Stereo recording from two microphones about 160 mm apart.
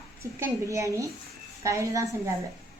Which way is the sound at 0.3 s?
20° right (ahead or behind).